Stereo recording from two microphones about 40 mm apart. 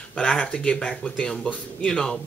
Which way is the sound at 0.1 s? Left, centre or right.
Left.